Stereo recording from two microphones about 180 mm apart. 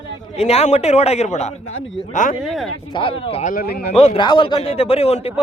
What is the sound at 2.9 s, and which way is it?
Speech, 30° left (ahead or behind).